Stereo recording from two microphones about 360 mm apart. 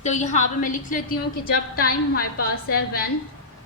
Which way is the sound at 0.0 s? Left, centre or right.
Centre.